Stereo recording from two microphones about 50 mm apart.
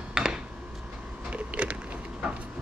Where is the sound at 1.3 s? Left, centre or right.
Right.